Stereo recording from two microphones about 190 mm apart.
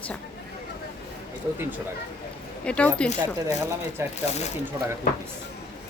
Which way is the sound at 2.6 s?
5° left (ahead or behind).